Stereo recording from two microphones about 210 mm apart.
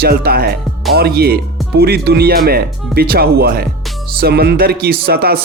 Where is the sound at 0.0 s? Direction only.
45° right (ahead or behind).